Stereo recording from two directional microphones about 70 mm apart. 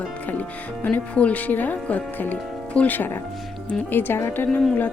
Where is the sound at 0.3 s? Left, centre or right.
Left.